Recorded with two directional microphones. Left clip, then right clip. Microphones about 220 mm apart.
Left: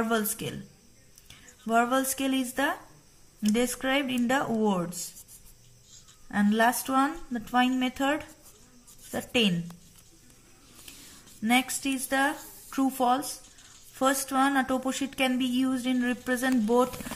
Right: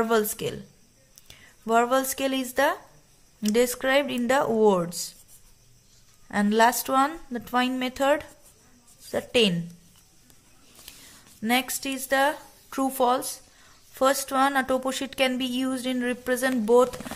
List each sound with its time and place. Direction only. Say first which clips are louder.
0.1 s speech: right 5 dB; 45° right (ahead or behind)
1.7 s speech: right 3 dB; 40° right (ahead or behind)
6.2 s a woman's voice: right 4 dB; 40° right (ahead or behind)
11.4 s a woman's voice: right 1 dB; 40° right (ahead or behind)